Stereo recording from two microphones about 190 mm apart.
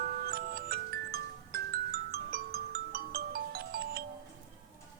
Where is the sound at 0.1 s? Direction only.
50° right (ahead or behind).